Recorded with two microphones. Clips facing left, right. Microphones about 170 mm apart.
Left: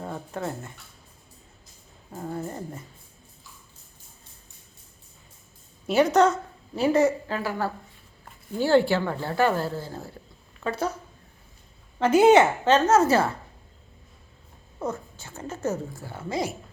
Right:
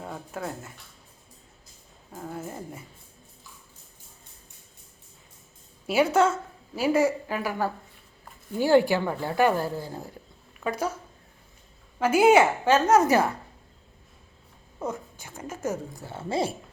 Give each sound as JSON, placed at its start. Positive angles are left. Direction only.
{"t": 0.0, "sound": "speech", "side_deg": -5}
{"t": 2.1, "sound": "a sound", "side_deg": 0}
{"t": 5.9, "sound": "a woman's voice", "side_deg": -10}
{"t": 11.9, "sound": "a woman's voice", "side_deg": -10}
{"t": 14.8, "sound": "a woman's voice", "side_deg": -10}
{"t": 16.0, "sound": "a woman's voice", "side_deg": -25}